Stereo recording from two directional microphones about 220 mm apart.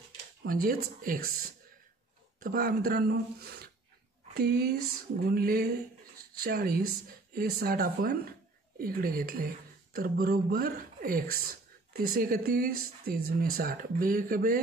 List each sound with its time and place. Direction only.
0.4 s speech: 40° right (ahead or behind)
2.4 s speech: 40° right (ahead or behind)